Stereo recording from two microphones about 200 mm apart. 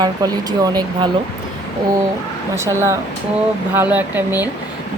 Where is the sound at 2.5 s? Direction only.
15° right (ahead or behind).